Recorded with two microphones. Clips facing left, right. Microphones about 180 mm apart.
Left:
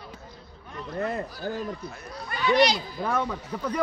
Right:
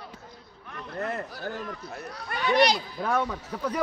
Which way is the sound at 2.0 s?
60° right (ahead or behind).